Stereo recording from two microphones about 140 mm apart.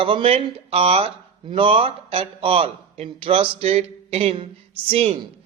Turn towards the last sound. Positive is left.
turn(degrees=-45)  # may be behind; listen again after turning